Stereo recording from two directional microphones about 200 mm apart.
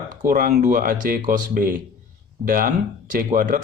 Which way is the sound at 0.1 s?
45° right (ahead or behind).